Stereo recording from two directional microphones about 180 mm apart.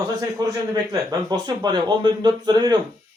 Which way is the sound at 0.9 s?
20° right (ahead or behind).